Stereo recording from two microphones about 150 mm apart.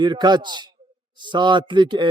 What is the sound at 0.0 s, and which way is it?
Speech, 30° right (ahead or behind).